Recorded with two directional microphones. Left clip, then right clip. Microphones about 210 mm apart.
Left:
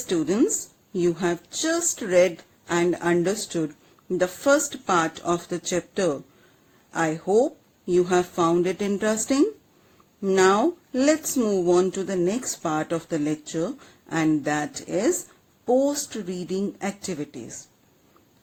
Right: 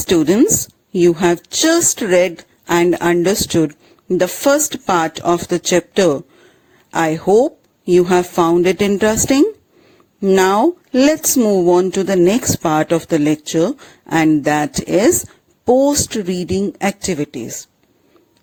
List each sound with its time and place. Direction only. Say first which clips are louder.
0.1 s speech: right 10 dB; 40° right (ahead or behind)